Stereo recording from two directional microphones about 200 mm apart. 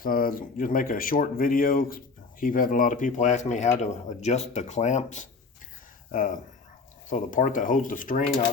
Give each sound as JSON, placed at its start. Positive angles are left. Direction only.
{"t": 0.0, "sound": "speech", "side_deg": 45}